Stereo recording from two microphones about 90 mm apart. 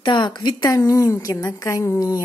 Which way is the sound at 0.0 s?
55° left (ahead or behind).